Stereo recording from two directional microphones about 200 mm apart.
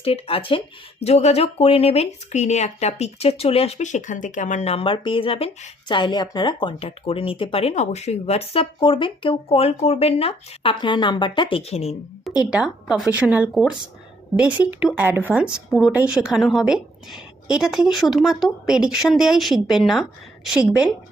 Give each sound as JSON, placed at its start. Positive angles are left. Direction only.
{"t": 0.0, "sound": "speech", "side_deg": 30}
{"t": 12.5, "sound": "a woman's voice", "side_deg": -5}